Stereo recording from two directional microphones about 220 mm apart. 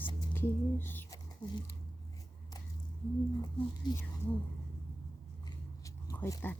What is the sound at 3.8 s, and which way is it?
Speech, 20° left (ahead or behind).